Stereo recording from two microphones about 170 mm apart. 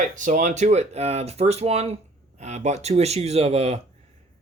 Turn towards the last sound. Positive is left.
turn(degrees=-40)  # may be behind; listen again after turning